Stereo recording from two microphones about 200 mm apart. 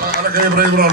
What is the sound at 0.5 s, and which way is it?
Speech, 50° right (ahead or behind).